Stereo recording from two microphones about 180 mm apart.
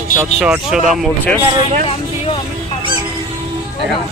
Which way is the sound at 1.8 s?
30° left (ahead or behind).